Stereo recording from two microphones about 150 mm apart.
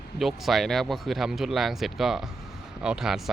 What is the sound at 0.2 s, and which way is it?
A man's voice, centre (ahead or behind).